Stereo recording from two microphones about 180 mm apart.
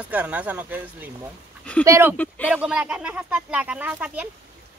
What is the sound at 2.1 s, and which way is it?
Speech, 10° left (ahead or behind).